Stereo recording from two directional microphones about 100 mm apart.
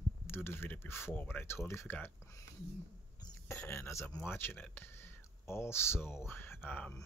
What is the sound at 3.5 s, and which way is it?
Speech, 25° left (ahead or behind).